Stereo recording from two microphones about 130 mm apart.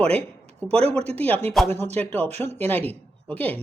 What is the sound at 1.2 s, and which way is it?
Speech, 10° left (ahead or behind).